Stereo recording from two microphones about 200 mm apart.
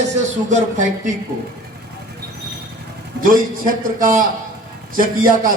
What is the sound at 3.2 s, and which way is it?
A man's voice, 45° right (ahead or behind).